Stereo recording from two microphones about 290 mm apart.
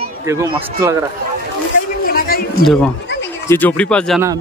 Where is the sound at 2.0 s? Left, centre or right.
Left.